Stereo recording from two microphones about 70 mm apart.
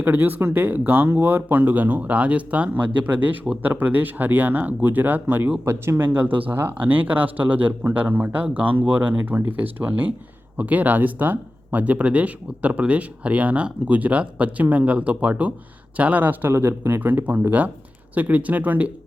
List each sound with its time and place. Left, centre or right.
0.0 s speech: right
16.5 s speech: right